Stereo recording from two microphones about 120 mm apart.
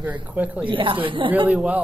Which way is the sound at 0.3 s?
15° right (ahead or behind).